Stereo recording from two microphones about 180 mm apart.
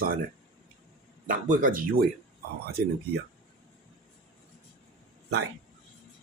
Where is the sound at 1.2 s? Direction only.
50° right (ahead or behind).